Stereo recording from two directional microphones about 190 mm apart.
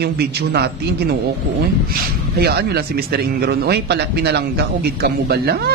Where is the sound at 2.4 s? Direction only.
55° right (ahead or behind).